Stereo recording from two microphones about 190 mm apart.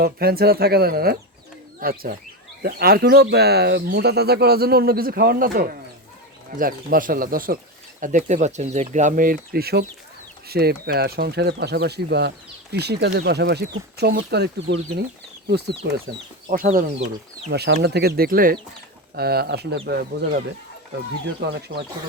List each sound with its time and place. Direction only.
0.0 s speech: 55° right (ahead or behind)
16.5 s speech: 45° right (ahead or behind)
17.5 s speech: 60° right (ahead or behind)
21.4 s speech: 55° right (ahead or behind)